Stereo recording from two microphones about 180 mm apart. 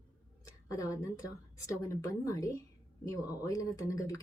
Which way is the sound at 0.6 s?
20° left (ahead or behind).